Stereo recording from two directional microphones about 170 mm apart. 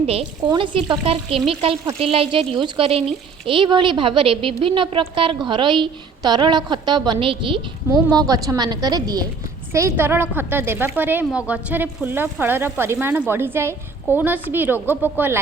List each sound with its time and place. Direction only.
0.0 s a woman's voice: 40° right (ahead or behind); by 15.1 s 10° right (ahead or behind)